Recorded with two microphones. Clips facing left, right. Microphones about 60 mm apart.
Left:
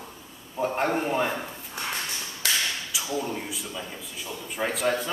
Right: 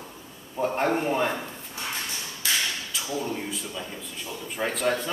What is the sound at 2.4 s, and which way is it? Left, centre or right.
Tap, left.